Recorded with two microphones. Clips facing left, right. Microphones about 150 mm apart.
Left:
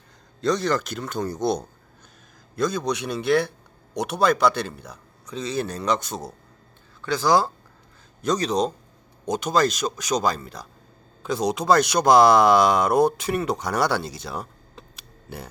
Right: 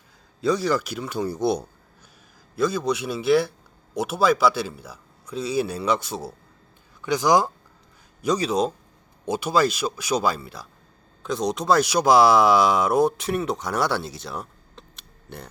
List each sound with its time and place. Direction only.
0.4 s a man's voice: 5° right (ahead or behind)
7.0 s speech: 15° right (ahead or behind); by 15.4 s 5° left (ahead or behind)